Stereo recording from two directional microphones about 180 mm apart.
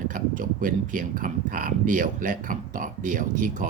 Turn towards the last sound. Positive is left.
turn(degrees=-45)  # may be behind; listen again after turning